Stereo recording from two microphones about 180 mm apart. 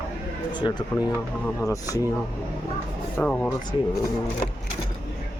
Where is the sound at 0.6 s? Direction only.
25° left (ahead or behind).